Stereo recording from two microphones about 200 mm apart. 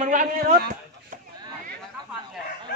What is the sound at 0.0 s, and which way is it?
A man's voice, 40° right (ahead or behind).